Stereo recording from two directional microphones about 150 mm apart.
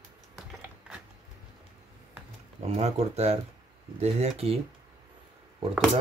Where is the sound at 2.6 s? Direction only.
45° right (ahead or behind).